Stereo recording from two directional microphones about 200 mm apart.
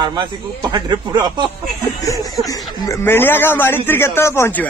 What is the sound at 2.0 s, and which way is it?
A man's voice, 15° left (ahead or behind).